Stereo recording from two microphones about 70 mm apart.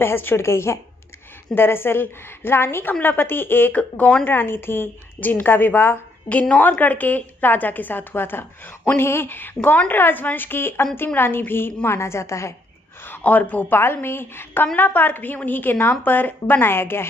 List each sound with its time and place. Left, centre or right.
0.0 s a woman's voice: left
13.0 s a woman's voice: left